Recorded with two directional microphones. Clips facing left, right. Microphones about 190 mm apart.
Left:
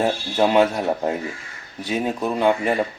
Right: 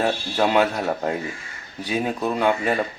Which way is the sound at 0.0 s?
20° left (ahead or behind).